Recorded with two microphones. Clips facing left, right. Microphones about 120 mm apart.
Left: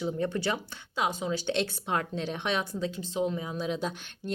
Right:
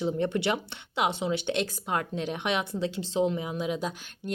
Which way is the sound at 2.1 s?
10° right (ahead or behind).